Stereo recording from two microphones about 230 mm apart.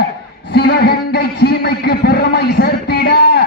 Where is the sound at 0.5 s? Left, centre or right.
Left.